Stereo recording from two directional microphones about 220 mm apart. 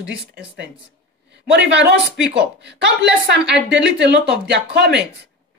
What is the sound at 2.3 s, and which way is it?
A woman's voice, 50° right (ahead or behind).